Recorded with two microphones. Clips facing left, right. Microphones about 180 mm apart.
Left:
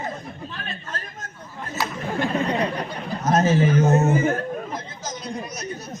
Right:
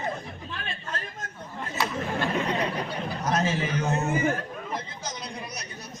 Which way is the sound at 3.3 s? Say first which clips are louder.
Left 9 dB; 45° left (ahead or behind).